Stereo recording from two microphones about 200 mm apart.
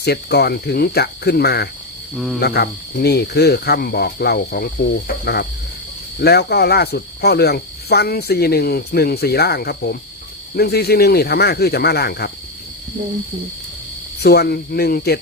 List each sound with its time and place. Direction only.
0.0 s cricket: 55° left (ahead or behind)
2.1 s speech: centre (ahead or behind)
2.4 s cricket: 55° left (ahead or behind)
14.2 s cricket: 50° left (ahead or behind)